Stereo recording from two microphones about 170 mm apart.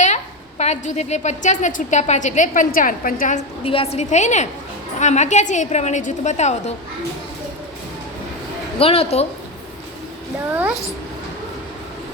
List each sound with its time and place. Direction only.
0.6 s a woman's voice: 40° left (ahead or behind)
3.6 s a woman's voice: 35° left (ahead or behind)
8.8 s a woman's voice: 35° left (ahead or behind)
10.5 s a child's voice: 10° right (ahead or behind)